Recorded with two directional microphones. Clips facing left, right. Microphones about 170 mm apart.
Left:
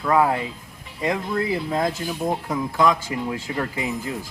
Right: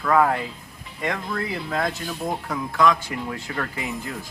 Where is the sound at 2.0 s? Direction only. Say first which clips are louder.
Left 3 dB; 5° left (ahead or behind).